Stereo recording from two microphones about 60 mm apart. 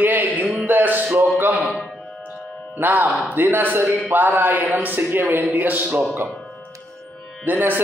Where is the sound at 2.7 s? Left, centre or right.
Right.